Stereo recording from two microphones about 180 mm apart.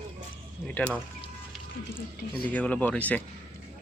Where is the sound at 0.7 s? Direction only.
5° left (ahead or behind).